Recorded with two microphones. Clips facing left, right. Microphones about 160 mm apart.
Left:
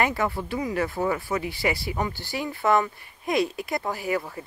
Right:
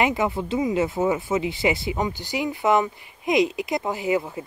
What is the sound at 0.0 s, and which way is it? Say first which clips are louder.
Speech: right 3 dB; 15° right (ahead or behind).